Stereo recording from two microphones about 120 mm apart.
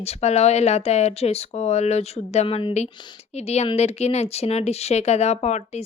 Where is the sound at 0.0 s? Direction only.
60° left (ahead or behind).